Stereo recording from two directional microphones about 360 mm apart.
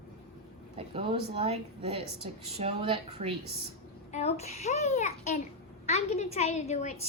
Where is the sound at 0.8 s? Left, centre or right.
Centre.